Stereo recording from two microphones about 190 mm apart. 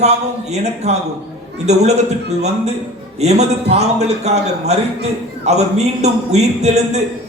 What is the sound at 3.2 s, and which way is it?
A man's voice, 35° right (ahead or behind).